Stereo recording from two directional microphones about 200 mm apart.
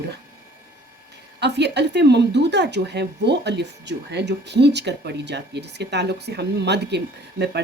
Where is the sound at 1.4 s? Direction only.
60° right (ahead or behind).